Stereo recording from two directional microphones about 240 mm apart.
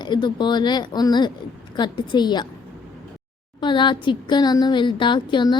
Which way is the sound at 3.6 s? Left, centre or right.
Centre.